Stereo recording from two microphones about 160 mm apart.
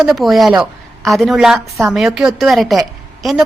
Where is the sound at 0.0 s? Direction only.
Centre (ahead or behind).